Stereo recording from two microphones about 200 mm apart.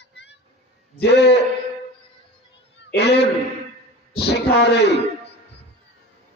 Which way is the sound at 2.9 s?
55° left (ahead or behind).